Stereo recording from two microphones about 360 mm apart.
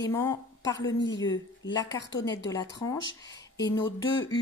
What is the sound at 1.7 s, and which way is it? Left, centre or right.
Speech, centre.